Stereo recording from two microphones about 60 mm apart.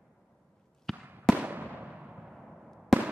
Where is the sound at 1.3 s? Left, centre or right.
Right.